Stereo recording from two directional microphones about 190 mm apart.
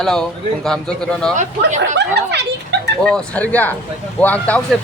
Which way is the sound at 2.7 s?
65° right (ahead or behind).